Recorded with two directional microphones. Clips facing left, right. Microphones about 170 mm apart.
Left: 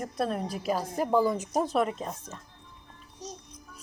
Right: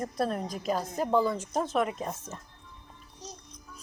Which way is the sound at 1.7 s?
35° left (ahead or behind).